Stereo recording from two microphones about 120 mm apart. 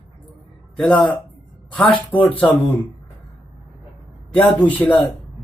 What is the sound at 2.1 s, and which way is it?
Speech, 15° left (ahead or behind).